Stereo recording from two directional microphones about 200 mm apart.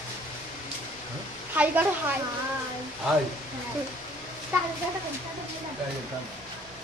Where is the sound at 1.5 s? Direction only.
10° right (ahead or behind).